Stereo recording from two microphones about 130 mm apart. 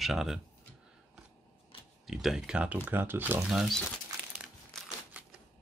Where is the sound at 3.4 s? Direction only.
5° right (ahead or behind).